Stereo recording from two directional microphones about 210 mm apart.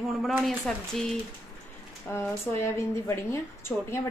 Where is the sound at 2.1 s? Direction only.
10° left (ahead or behind).